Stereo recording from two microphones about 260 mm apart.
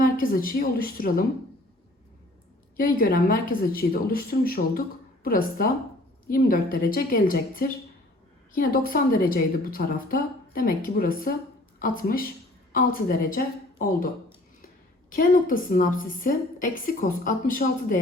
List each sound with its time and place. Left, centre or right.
0.0 s a woman's voice: left
2.7 s a woman's voice: left
15.1 s a woman's voice: left